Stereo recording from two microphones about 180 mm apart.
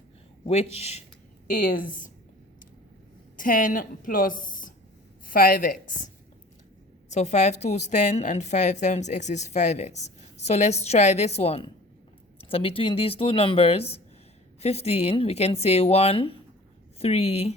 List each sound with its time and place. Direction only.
0.4 s a woman's voice: 35° left (ahead or behind)
1.5 s a woman's voice: 50° left (ahead or behind)
3.3 s a woman's voice: 50° left (ahead or behind)
7.1 s a woman's voice: 40° left (ahead or behind)